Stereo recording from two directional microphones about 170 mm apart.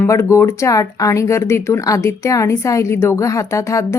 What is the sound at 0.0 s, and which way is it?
A woman's voice, 15° left (ahead or behind).